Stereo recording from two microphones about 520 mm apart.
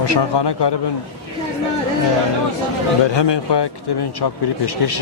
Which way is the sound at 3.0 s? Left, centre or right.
Left.